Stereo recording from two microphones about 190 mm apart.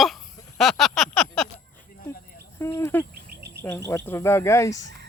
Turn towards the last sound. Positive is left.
turn(degrees=15)  # may be behind; listen again after turning